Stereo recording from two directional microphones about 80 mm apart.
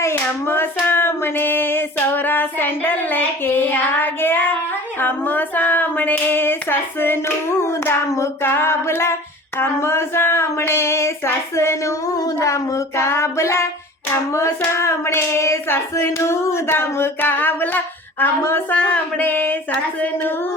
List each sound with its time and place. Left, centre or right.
0.0 s hands: left